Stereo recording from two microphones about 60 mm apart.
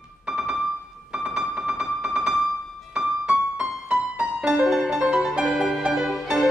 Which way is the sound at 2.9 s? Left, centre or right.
Centre.